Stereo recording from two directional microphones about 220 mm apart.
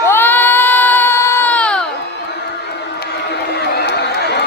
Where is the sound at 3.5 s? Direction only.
50° left (ahead or behind).